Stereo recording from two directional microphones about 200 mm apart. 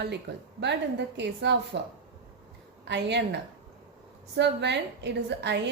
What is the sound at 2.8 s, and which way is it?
Speech, 60° right (ahead or behind).